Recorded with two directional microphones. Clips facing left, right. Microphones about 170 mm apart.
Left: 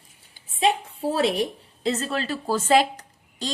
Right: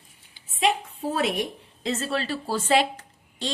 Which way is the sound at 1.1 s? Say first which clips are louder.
Left 3 dB; 30° left (ahead or behind).